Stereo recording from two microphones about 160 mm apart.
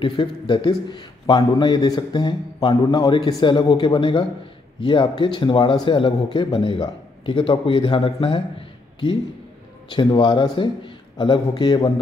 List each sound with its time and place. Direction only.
0.0 s a man's voice: 30° left (ahead or behind)
9.8 s a man's voice: 30° left (ahead or behind)